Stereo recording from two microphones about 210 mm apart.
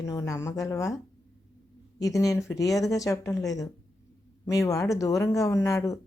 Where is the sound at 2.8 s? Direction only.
15° left (ahead or behind).